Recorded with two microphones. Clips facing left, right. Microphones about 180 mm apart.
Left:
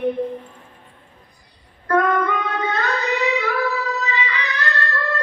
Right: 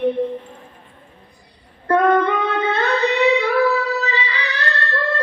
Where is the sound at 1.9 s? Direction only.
30° right (ahead or behind).